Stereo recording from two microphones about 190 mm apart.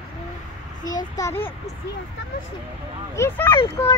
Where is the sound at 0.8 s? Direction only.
20° left (ahead or behind).